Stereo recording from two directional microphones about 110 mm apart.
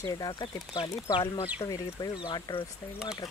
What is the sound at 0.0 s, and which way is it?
Speech, 35° left (ahead or behind).